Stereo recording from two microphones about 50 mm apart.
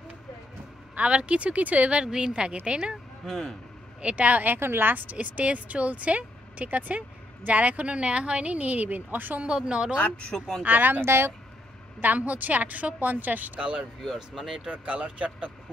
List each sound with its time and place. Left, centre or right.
0.9 s speech: right
3.3 s speech: centre
4.0 s speech: right
4.6 s speech: right
5.1 s speech: right
9.4 s speech: centre
9.9 s speech: left
10.3 s speech: centre
10.6 s a woman's voice: right
11.0 s speech: right
12.0 s a woman's voice: right
13.7 s speech: centre
14.6 s speech: right